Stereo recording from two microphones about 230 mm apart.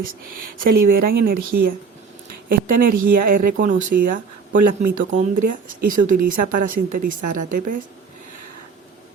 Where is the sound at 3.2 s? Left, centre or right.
Right.